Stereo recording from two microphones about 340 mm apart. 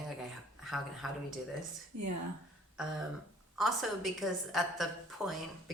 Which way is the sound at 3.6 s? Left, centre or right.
Centre.